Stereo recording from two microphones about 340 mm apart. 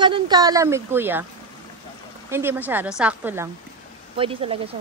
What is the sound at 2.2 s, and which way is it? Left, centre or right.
Speech, centre.